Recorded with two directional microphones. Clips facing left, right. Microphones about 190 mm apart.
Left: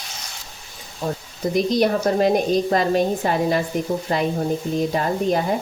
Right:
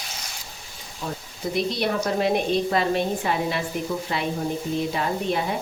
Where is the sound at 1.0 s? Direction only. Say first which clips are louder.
Left 6 dB; 40° left (ahead or behind).